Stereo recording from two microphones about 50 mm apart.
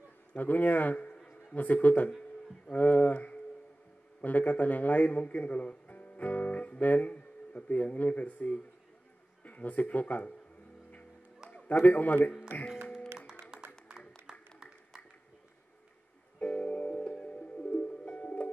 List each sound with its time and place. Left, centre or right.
0.3 s a man's voice: left
2.7 s a sound: left
4.2 s speech: left
11.8 s a man's voice: left
13.5 s music: centre
16.3 s music: left